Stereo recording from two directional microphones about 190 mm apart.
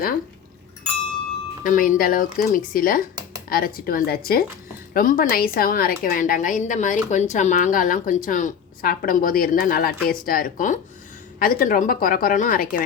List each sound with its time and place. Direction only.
1.6 s a woman's voice: 45° left (ahead or behind)